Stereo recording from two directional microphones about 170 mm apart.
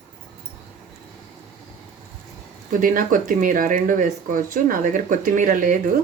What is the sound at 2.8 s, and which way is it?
Speech, 55° right (ahead or behind).